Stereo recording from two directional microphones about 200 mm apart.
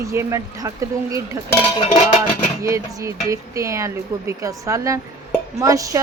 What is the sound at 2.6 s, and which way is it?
Speech, 15° right (ahead or behind).